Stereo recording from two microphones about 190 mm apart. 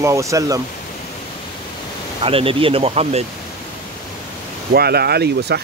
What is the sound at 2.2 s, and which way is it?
Speech, 30° right (ahead or behind).